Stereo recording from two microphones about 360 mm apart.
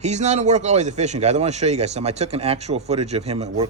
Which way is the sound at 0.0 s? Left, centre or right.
Centre.